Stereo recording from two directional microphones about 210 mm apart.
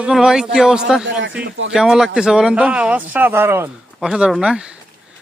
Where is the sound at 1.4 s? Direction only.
60° right (ahead or behind).